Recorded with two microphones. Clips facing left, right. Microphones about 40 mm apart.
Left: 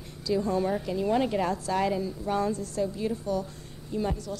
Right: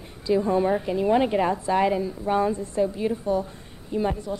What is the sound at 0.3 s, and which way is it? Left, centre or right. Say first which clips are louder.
A woman's voice: right 5 dB; right.